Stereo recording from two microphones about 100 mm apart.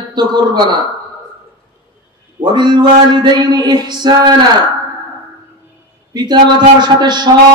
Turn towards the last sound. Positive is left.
turn(degrees=-45)  # may be behind; listen again after turning